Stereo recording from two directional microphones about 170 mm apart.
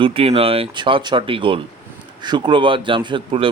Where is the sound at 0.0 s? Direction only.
35° right (ahead or behind).